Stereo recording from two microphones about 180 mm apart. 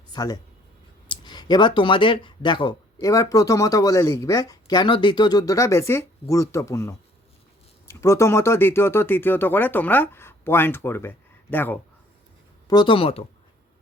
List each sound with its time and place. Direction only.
0.1 s speech: 20° left (ahead or behind)
12.6 s speech: 25° left (ahead or behind)